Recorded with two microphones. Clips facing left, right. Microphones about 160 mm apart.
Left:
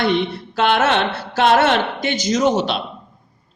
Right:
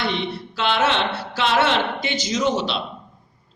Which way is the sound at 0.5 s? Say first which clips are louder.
Left 4 dB; 50° left (ahead or behind).